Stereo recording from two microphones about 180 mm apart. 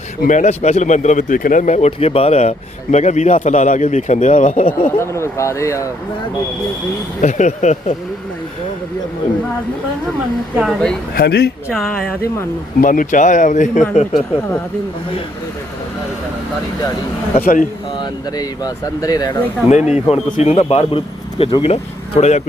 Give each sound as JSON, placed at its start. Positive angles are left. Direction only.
{"t": 0.2, "sound": "speech", "side_deg": 45}
{"t": 4.9, "sound": "speech", "side_deg": 15}
{"t": 7.2, "sound": "speech", "side_deg": 40}
{"t": 10.6, "sound": "speech", "side_deg": 0}
{"t": 11.1, "sound": "speech", "side_deg": 60}
{"t": 11.7, "sound": "speech", "side_deg": 5}
{"t": 12.8, "sound": "speech", "side_deg": 50}
{"t": 17.4, "sound": "speech", "side_deg": 50}
{"t": 18.3, "sound": "speech", "side_deg": 20}
{"t": 19.6, "sound": "speech", "side_deg": 40}